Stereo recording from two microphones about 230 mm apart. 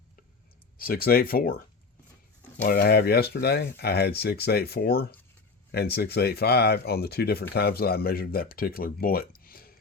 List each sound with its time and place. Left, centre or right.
0.8 s speech: left
2.6 s speech: left